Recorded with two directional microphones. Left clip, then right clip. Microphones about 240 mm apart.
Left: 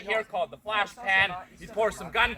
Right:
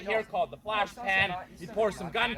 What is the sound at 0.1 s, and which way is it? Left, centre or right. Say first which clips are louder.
A man's voice: left 1 dB; centre.